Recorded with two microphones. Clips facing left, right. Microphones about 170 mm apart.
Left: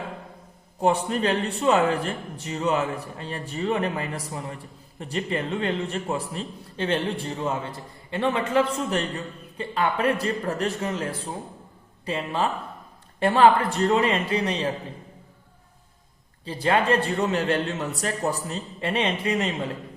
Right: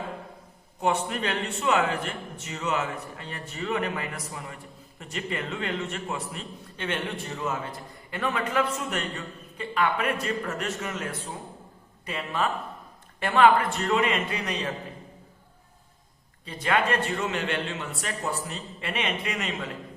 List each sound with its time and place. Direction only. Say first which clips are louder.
0.8 s a man's voice: left 4 dB; 35° left (ahead or behind)
16.5 s a man's voice: left 4 dB; 30° left (ahead or behind)